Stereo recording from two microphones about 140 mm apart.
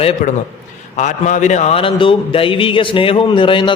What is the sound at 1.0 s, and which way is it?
Speech, 60° left (ahead or behind).